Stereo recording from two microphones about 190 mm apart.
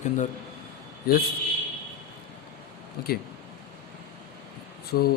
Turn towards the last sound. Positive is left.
turn(degrees=55)  # may be behind; listen again after turning